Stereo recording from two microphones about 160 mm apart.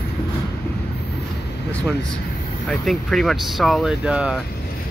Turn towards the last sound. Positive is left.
turn(degrees=-5)  # may be behind; listen again after turning